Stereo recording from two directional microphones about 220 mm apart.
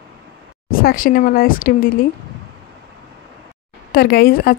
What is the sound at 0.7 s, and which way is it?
Speech, 40° left (ahead or behind).